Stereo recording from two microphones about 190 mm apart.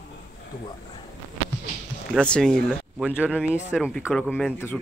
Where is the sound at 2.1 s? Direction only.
5° left (ahead or behind).